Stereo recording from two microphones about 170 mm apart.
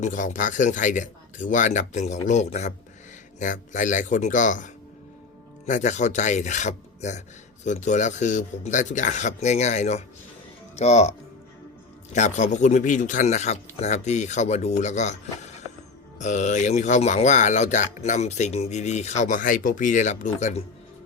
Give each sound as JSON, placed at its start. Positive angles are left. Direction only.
{"t": 0.0, "sound": "speech", "side_deg": 45}
{"t": 12.1, "sound": "speech", "side_deg": 45}